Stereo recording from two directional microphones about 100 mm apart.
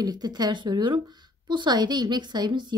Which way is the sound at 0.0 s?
45° right (ahead or behind).